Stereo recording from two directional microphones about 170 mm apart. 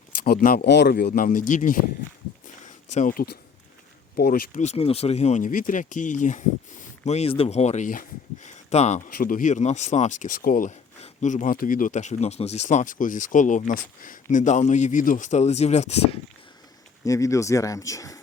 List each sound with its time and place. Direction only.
0.3 s speech: 65° left (ahead or behind)
2.6 s a sound: 45° left (ahead or behind)
4.1 s speech: 60° left (ahead or behind); by 16.2 s 40° left (ahead or behind)
17.1 s speech: 20° left (ahead or behind)